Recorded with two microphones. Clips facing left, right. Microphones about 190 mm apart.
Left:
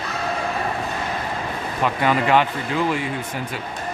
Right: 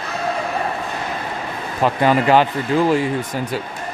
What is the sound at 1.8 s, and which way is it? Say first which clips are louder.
Speech: right 4 dB; 35° right (ahead or behind).